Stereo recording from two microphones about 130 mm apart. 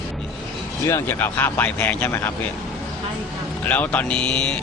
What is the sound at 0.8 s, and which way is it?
Speech, 20° left (ahead or behind).